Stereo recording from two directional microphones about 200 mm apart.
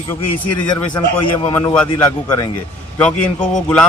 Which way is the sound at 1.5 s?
10° left (ahead or behind).